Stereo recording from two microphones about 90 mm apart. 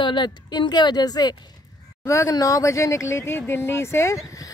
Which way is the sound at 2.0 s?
35° left (ahead or behind).